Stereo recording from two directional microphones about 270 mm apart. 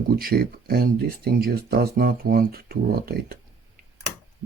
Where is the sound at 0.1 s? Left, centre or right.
Right.